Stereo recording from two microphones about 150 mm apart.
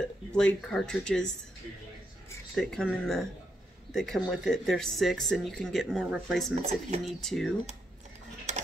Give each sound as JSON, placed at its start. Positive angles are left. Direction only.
{"t": 0.3, "sound": "speech", "side_deg": 5}
{"t": 2.5, "sound": "speech", "side_deg": 5}
{"t": 6.0, "sound": "speech", "side_deg": -10}
{"t": 6.6, "sound": "speech", "side_deg": -45}
{"t": 7.1, "sound": "speech", "side_deg": 0}